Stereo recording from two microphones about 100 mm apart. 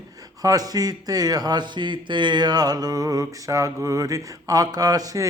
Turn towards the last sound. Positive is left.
turn(degrees=-35)  # may be behind; listen again after turning